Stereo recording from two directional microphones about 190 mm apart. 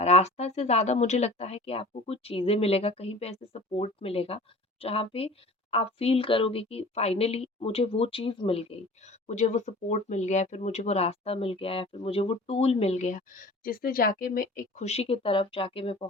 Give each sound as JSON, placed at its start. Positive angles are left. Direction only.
{"t": 0.0, "sound": "speech", "side_deg": 35}